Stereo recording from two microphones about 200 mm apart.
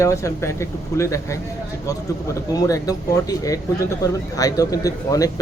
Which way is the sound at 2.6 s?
15° left (ahead or behind).